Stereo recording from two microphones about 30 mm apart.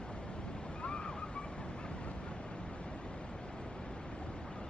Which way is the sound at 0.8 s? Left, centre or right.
Left.